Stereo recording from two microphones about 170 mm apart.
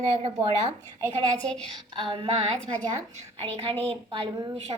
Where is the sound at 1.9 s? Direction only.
30° right (ahead or behind).